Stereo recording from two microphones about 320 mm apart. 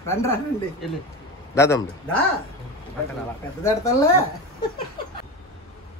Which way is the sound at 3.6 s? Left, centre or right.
Centre.